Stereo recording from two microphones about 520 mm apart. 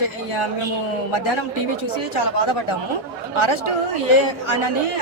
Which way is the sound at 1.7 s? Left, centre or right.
Left.